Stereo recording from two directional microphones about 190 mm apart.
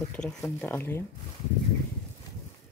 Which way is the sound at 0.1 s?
5° left (ahead or behind).